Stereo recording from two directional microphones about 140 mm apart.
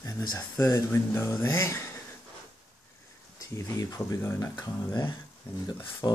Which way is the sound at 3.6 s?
25° left (ahead or behind).